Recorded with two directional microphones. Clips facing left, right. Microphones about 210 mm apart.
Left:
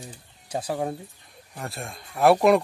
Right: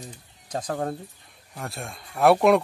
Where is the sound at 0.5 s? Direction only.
10° left (ahead or behind).